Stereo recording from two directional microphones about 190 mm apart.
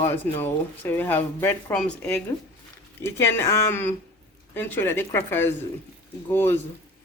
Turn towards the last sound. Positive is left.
turn(degrees=10)  # may be behind; listen again after turning